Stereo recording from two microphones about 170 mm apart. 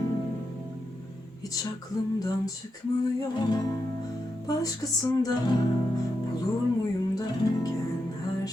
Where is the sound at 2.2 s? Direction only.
20° left (ahead or behind).